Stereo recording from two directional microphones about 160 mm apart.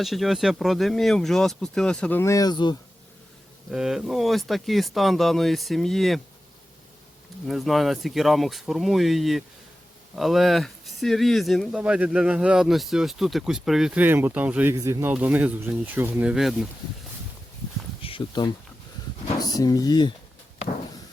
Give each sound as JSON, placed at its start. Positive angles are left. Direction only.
{"t": 0.0, "sound": "speech", "side_deg": 0}
{"t": 3.7, "sound": "speech", "side_deg": -5}
{"t": 7.4, "sound": "speech", "side_deg": 0}
{"t": 16.3, "sound": "speech", "side_deg": 0}
{"t": 18.0, "sound": "speech", "side_deg": 30}